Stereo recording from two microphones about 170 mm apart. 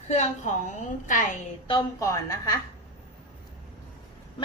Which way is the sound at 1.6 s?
25° left (ahead or behind).